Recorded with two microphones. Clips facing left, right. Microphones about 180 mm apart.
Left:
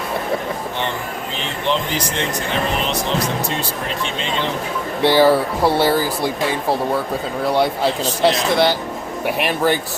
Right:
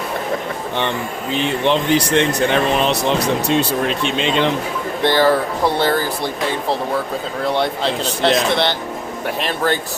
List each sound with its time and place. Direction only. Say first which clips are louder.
1.6 s speech: right 4 dB; 65° right (ahead or behind)
5.0 s speech: left 2 dB; 10° left (ahead or behind)
7.4 s speech: left 2 dB; 5° left (ahead or behind)